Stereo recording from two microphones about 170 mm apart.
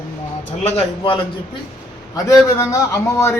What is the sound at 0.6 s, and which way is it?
Speech, 35° left (ahead or behind).